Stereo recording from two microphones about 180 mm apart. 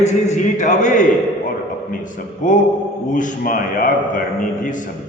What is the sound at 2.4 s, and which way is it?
A man's voice, 45° left (ahead or behind).